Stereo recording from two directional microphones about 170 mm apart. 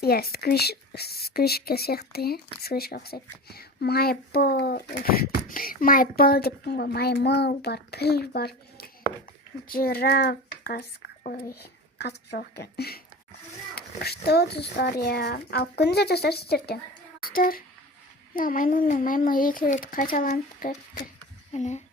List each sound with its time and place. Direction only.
0.0 s speech: 65° left (ahead or behind)
17.2 s a sound: 60° left (ahead or behind)
18.3 s speech: 55° left (ahead or behind)
21.5 s speech: 45° left (ahead or behind)